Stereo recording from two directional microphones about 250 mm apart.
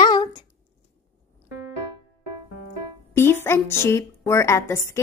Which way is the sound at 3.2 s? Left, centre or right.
Centre.